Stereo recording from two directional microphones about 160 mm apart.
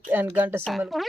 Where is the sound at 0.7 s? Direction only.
Centre (ahead or behind).